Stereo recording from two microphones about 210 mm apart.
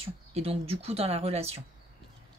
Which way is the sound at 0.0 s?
30° right (ahead or behind).